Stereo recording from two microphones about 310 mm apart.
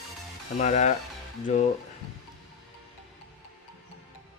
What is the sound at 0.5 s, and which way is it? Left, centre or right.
Speech, left.